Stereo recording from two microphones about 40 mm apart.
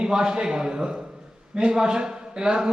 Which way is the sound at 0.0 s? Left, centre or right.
Centre.